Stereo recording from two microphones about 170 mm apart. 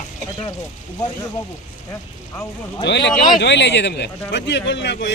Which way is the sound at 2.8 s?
90° left.